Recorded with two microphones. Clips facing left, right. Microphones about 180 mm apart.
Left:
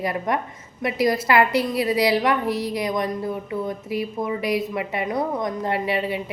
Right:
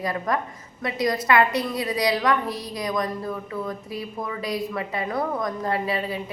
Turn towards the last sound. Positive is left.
turn(degrees=25)  # may be behind; listen again after turning